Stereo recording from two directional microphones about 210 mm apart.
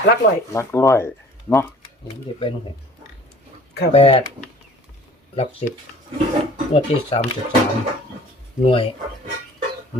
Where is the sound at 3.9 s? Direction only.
25° left (ahead or behind).